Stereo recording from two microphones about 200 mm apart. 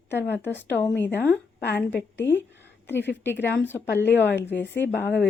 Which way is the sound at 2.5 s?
60° left (ahead or behind).